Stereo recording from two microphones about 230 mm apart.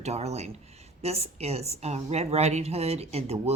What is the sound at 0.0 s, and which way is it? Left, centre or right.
Speech, right.